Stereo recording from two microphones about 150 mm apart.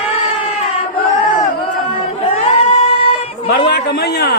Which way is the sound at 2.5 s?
40° left (ahead or behind).